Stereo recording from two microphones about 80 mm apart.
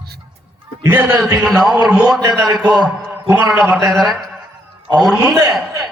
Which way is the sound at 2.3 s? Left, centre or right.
Centre.